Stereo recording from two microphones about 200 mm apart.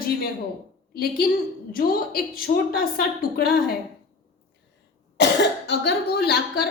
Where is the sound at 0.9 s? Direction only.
50° left (ahead or behind).